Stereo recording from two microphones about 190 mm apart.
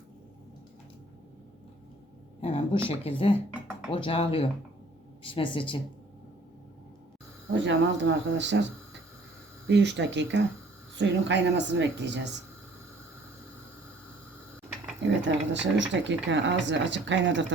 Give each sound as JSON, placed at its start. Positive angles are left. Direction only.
{"t": 2.4, "sound": "a woman's voice", "side_deg": 30}
{"t": 7.5, "sound": "speech", "side_deg": -75}
{"t": 9.6, "sound": "speech", "side_deg": -70}
{"t": 15.0, "sound": "speech", "side_deg": -70}